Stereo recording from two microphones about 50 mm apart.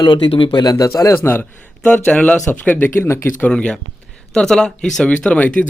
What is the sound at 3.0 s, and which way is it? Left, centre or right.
Speech, left.